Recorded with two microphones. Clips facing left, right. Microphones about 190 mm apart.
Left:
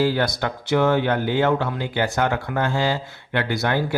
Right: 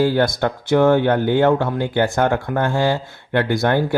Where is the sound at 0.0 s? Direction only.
50° right (ahead or behind).